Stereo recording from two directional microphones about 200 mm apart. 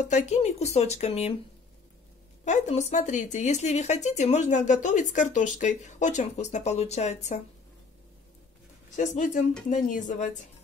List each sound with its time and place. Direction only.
0.0 s speech: 35° left (ahead or behind)
2.4 s speech: 35° left (ahead or behind)
8.9 s speech: 40° left (ahead or behind)